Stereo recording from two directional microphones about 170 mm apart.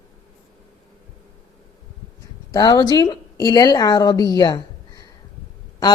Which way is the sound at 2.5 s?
25° left (ahead or behind).